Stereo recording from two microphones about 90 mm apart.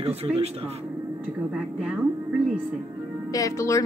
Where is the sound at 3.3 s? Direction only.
40° left (ahead or behind).